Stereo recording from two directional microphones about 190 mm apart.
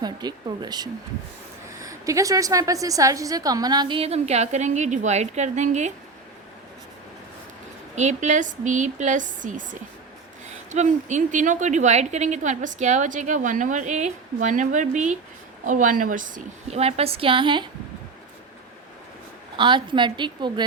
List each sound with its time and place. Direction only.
0.0 s a woman's voice: 20° right (ahead or behind); by 5.9 s 40° right (ahead or behind)
7.9 s a woman's voice: 40° right (ahead or behind)
10.7 s a woman's voice: 40° right (ahead or behind)
19.5 s a woman's voice: 25° right (ahead or behind)